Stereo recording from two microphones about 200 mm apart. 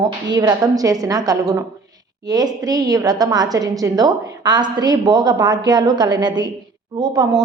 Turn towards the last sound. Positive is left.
turn(degrees=-20)  # may be behind; listen again after turning